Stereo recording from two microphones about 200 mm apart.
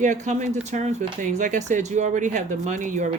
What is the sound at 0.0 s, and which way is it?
Speech, 40° right (ahead or behind).